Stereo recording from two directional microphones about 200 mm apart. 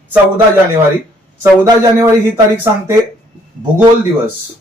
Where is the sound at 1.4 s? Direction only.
20° right (ahead or behind).